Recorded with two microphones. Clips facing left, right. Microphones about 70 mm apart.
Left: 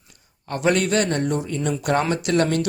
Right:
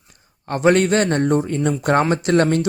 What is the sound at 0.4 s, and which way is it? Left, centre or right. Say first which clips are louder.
Speech: right 5 dB; right.